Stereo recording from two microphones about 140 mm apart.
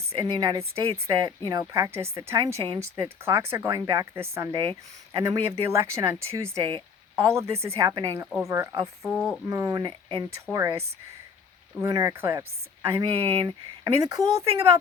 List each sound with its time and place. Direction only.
0.2 s speech: 30° right (ahead or behind)
6.5 s speech: 35° right (ahead or behind)
7.2 s speech: 20° right (ahead or behind)
10.5 s speech: 20° right (ahead or behind)